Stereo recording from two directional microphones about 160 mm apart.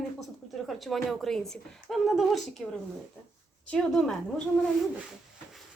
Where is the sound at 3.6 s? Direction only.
5° left (ahead or behind).